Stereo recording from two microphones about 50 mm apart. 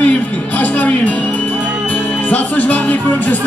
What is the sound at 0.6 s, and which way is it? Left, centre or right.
Speech, left.